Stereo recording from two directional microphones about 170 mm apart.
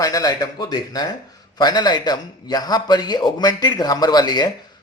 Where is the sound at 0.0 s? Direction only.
20° left (ahead or behind).